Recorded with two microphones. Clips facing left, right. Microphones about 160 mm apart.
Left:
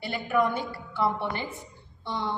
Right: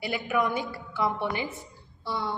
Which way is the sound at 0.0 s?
10° right (ahead or behind).